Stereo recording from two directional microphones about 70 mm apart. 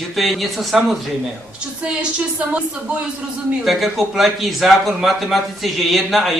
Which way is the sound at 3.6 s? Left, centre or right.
Centre.